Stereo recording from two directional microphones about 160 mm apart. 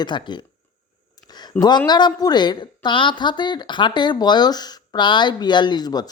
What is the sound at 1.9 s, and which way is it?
A woman's voice, 25° left (ahead or behind).